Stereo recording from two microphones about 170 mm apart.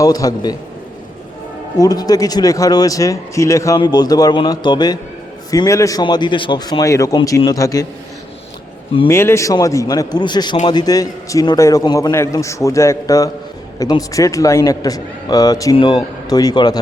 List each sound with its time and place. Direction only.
0.0 s a man's voice: 20° left (ahead or behind)
1.8 s a man's voice: 20° left (ahead or behind)
9.0 s a man's voice: 15° left (ahead or behind)